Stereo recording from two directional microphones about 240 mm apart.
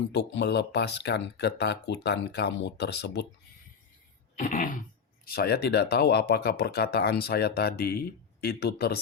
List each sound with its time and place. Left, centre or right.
0.1 s speech: left
4.4 s speech: left